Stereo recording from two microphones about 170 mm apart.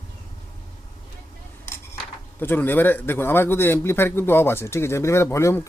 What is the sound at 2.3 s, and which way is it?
A man's voice, 10° left (ahead or behind).